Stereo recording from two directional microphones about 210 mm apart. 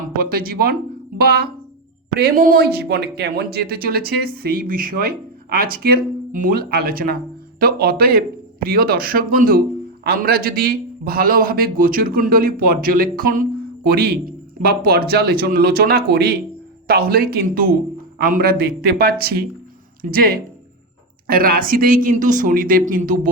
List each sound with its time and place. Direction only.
0.2 s a man's voice: 45° right (ahead or behind)